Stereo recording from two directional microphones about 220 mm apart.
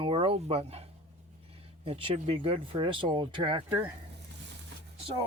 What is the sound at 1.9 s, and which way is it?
Speech, 25° right (ahead or behind).